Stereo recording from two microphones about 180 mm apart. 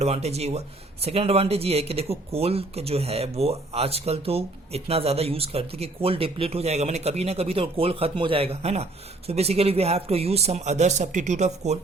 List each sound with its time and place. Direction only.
0.0 s speech: 35° right (ahead or behind)